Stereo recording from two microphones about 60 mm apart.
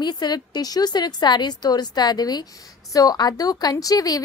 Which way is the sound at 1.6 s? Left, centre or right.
Left.